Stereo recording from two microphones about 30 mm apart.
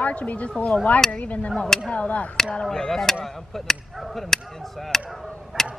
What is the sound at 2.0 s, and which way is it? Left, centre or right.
Speech, left.